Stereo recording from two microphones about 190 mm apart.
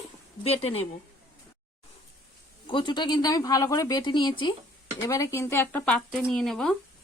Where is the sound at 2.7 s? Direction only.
25° left (ahead or behind).